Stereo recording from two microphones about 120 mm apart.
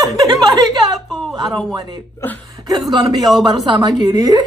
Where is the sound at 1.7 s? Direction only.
35° right (ahead or behind).